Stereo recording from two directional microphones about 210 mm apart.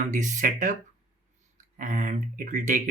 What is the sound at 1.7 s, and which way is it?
Speech, 35° right (ahead or behind).